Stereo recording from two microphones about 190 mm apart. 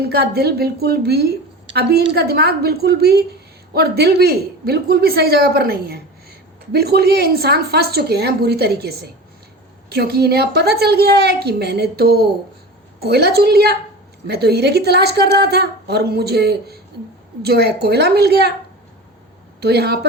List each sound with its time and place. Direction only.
0.0 s a woman's voice: 55° right (ahead or behind)
19.5 s a woman's voice: 60° right (ahead or behind)